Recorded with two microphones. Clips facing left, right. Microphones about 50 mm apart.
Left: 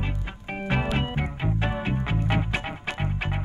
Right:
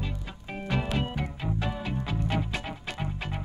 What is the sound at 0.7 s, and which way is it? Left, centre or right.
Music, left.